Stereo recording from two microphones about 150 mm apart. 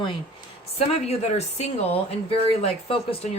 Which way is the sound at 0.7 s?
45° left (ahead or behind).